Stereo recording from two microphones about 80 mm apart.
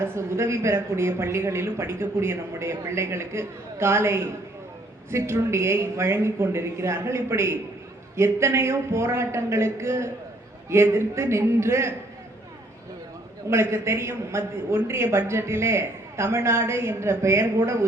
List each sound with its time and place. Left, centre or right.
0.0 s a man's voice: right
13.5 s a man's voice: right